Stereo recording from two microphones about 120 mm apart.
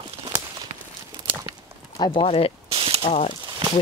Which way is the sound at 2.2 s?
55° left (ahead or behind).